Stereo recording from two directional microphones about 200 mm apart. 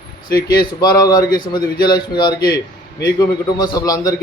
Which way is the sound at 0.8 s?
20° left (ahead or behind).